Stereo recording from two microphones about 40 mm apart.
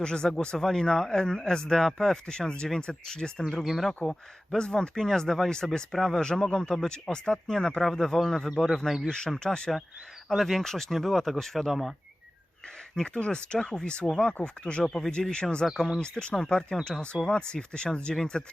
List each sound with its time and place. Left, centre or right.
0.0 s speech: left
3.6 s speech: centre
4.0 s speech: centre
7.8 s speech: centre
10.2 s speech: centre
11.7 s speech: centre
13.1 s speech: left